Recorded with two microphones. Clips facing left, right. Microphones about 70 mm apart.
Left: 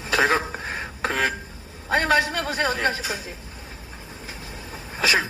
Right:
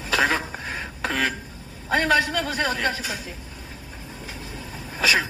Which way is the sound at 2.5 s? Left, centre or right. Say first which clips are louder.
Left 1 dB; left.